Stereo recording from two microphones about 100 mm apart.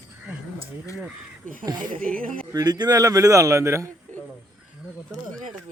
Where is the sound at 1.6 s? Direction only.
45° right (ahead or behind); by 3.9 s 30° right (ahead or behind).